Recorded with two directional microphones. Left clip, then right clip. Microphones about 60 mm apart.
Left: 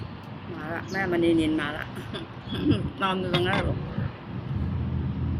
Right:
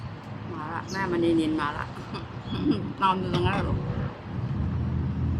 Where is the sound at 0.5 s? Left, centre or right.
Centre.